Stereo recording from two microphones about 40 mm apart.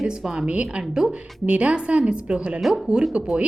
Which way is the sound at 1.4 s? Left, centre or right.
Right.